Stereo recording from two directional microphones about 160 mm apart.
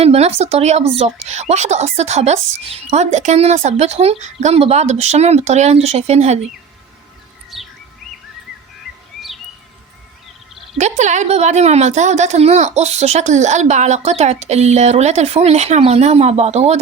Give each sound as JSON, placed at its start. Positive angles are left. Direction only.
{"t": 0.0, "sound": "a woman's voice", "side_deg": -40}
{"t": 7.5, "sound": "bird", "side_deg": 0}
{"t": 10.8, "sound": "a woman's voice", "side_deg": -45}